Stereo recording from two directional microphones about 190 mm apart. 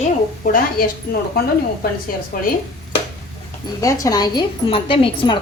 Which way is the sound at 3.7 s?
20° left (ahead or behind).